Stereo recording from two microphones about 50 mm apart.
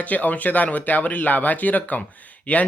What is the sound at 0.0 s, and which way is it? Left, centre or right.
Speech, left.